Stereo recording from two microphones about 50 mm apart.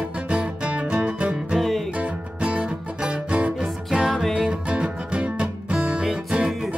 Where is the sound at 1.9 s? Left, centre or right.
Right.